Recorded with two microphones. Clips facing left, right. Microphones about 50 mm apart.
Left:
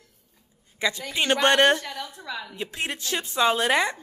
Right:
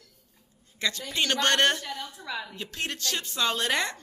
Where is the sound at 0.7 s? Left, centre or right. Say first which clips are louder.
Left 3 dB; centre.